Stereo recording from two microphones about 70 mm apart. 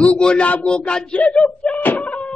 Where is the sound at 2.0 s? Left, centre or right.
Centre.